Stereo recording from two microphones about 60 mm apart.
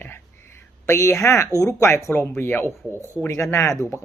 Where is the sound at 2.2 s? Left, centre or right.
Left.